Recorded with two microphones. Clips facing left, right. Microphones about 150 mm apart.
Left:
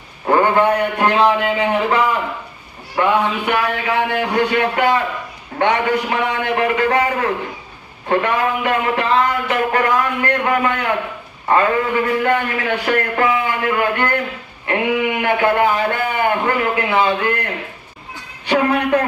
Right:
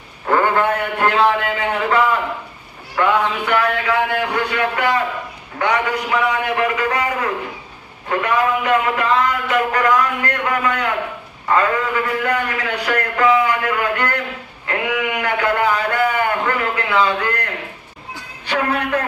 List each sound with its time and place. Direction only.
0.3 s a sound: 20° left (ahead or behind)
0.8 s speech: 20° left (ahead or behind)
18.4 s speech: 30° left (ahead or behind)